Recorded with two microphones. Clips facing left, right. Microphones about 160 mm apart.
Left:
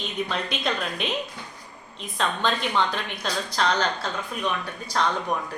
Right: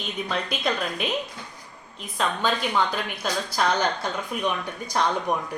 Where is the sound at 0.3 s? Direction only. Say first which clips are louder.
Right 1 dB; centre (ahead or behind).